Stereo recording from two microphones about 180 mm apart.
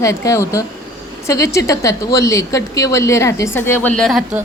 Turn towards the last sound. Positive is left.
turn(degrees=0)  # may be behind; listen again after turning